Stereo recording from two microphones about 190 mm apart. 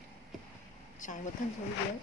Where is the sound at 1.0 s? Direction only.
40° left (ahead or behind).